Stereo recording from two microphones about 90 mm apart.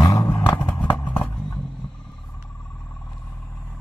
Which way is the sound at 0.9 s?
25° left (ahead or behind).